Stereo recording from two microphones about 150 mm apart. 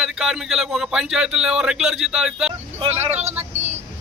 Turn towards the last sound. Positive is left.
turn(degrees=-50)  # may be behind; listen again after turning